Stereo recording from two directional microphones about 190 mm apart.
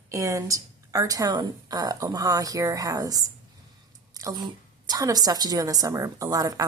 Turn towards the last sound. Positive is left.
turn(degrees=-20)  # may be behind; listen again after turning